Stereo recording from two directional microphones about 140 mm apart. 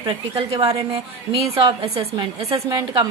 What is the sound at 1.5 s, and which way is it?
A woman's voice, 40° right (ahead or behind).